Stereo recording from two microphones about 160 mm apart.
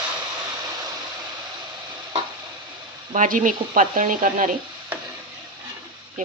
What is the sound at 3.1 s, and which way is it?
Speech, 55° right (ahead or behind).